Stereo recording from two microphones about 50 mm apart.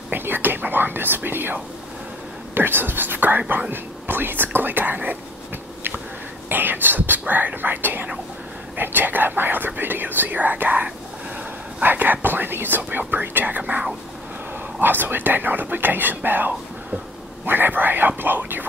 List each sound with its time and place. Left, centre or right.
0.1 s whispering: right
2.5 s speech: right
6.5 s speech: right